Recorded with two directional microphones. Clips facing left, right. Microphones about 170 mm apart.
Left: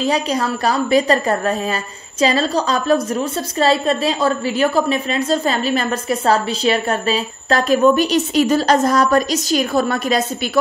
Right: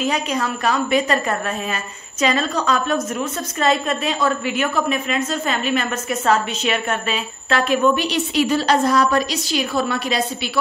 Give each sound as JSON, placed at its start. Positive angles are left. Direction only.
{"t": 0.0, "sound": "a woman's voice", "side_deg": 35}